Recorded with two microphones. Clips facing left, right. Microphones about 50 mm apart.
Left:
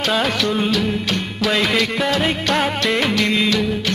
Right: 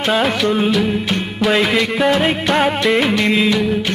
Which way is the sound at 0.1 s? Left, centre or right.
Centre.